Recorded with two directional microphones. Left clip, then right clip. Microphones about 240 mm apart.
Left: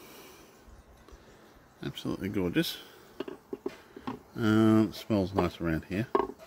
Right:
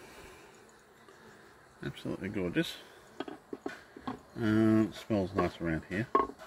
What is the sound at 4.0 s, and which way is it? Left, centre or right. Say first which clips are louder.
Speech: left 3 dB; left.